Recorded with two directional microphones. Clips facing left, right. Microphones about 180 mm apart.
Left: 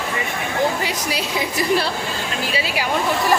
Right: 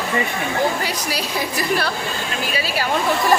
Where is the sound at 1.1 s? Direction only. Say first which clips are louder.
Left 1 dB; 20° left (ahead or behind).